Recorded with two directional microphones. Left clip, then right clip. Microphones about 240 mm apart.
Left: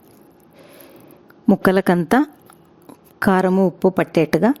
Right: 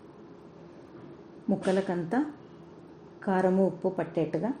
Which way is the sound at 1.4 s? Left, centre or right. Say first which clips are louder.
Left 12 dB; left.